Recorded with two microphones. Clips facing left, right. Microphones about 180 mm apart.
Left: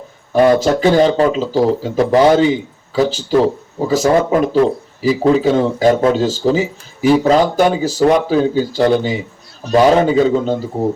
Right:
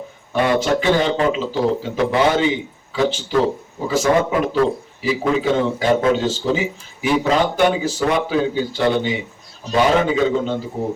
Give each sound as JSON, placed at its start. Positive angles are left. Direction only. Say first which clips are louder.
{"t": 0.3, "sound": "speech", "louder": "left 6 dB", "side_deg": 40}